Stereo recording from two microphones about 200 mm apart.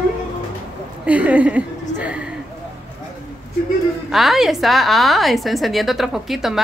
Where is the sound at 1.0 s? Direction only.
5° right (ahead or behind).